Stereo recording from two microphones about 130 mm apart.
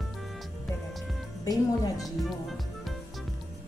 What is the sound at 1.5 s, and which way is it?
Speech, 30° left (ahead or behind).